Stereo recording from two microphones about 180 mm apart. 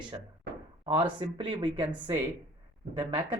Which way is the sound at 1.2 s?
25° right (ahead or behind).